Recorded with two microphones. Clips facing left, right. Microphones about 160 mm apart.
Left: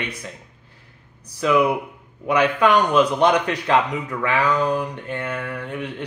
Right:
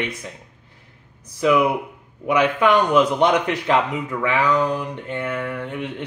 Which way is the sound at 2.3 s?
20° right (ahead or behind).